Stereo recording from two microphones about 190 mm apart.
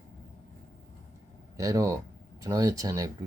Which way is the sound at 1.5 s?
15° right (ahead or behind).